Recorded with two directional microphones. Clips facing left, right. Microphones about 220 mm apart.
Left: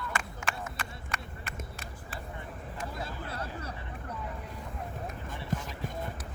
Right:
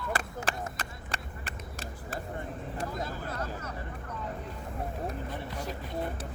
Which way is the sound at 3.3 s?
30° left (ahead or behind).